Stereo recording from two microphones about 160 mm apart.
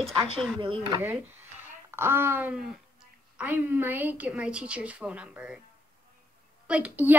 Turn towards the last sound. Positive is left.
turn(degrees=-10)  # may be behind; listen again after turning